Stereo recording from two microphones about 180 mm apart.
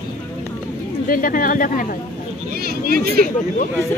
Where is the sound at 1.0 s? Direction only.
50° left (ahead or behind).